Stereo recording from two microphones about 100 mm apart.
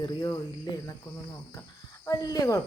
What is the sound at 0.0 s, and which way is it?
Speech, 45° left (ahead or behind).